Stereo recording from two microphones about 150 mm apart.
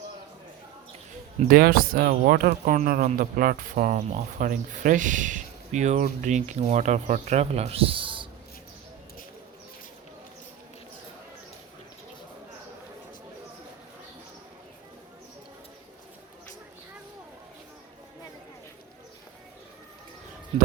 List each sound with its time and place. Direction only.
1.5 s speech: 80° right
2.7 s speech: 60° right (ahead or behind); by 8.3 s 35° right (ahead or behind)